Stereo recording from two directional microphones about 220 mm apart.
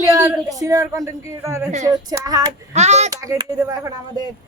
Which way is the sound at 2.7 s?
30° right (ahead or behind).